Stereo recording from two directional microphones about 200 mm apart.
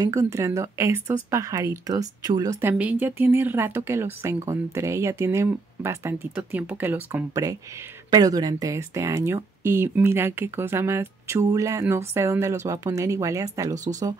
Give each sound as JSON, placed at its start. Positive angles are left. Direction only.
{"t": 0.0, "sound": "speech", "side_deg": -15}